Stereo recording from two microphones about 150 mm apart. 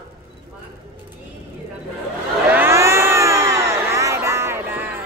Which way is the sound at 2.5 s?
15° right (ahead or behind).